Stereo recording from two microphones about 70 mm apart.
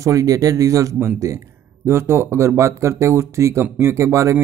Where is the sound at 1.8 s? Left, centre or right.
Right.